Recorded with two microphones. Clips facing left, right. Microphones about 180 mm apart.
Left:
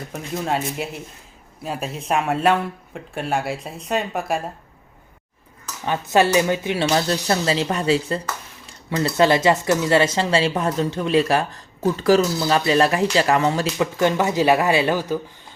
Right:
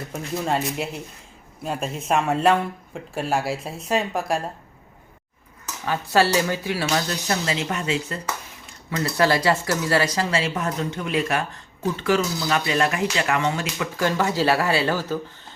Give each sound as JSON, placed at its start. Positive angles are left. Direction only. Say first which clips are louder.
{"t": 0.1, "sound": "speech", "louder": "even", "side_deg": 0}
{"t": 5.8, "sound": "speech", "louder": "left 2 dB", "side_deg": 20}
{"t": 14.0, "sound": "speech", "louder": "left 2 dB", "side_deg": 20}